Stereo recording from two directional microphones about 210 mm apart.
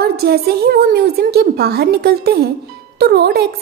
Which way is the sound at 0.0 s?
50° right (ahead or behind).